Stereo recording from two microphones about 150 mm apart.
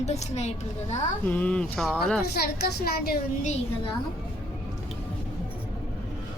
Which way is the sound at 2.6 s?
90° left.